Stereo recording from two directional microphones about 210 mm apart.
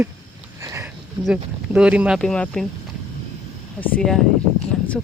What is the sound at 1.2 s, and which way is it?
Speech, 5° right (ahead or behind).